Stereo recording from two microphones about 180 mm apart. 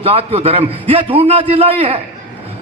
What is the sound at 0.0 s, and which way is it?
A man's voice, 30° right (ahead or behind).